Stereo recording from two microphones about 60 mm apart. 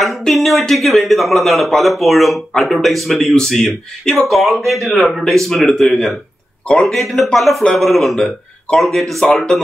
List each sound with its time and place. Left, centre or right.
0.2 s a man's voice: centre
6.9 s a man's voice: centre
9.2 s speech: centre